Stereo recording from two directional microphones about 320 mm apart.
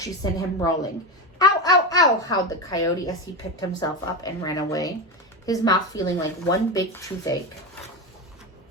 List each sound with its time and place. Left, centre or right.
0.0 s a child's voice: centre